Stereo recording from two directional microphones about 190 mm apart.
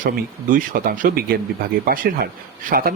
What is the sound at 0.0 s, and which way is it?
Speech, 45° right (ahead or behind).